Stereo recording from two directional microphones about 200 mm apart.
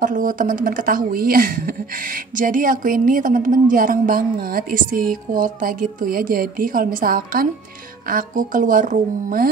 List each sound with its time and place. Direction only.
0.0 s a woman's voice: 40° right (ahead or behind)